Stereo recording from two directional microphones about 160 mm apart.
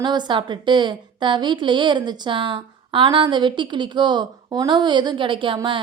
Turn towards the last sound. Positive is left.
turn(degrees=-30)  # may be behind; listen again after turning